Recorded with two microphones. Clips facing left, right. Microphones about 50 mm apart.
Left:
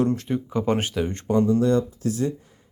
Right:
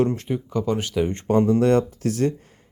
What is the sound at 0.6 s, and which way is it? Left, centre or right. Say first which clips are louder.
Speech: left 1 dB; left.